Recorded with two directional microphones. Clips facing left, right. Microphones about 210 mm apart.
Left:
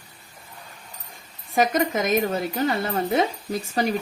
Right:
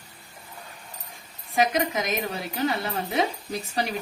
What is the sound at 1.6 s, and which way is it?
Speech, 45° left (ahead or behind).